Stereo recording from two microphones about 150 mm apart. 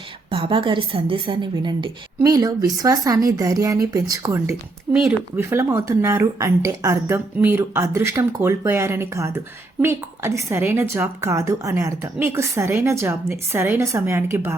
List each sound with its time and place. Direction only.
0.3 s a woman's voice: 35° right (ahead or behind); by 4.9 s 20° right (ahead or behind)
4.9 s a woman's voice: 5° right (ahead or behind)
5.5 s a woman's voice: 20° right (ahead or behind)